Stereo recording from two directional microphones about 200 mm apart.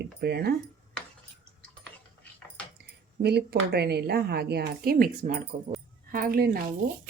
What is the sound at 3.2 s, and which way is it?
Speech, 55° right (ahead or behind).